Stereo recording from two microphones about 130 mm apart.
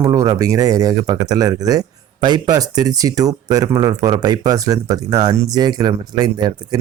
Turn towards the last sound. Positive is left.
turn(degrees=-30)  # may be behind; listen again after turning